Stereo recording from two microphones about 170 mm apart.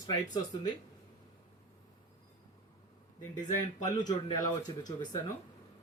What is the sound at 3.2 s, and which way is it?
Speech, 25° left (ahead or behind).